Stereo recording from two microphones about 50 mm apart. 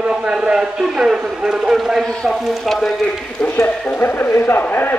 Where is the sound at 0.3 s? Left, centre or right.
Centre.